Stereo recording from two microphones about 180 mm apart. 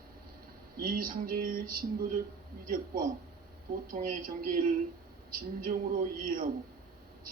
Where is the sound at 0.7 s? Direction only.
55° right (ahead or behind).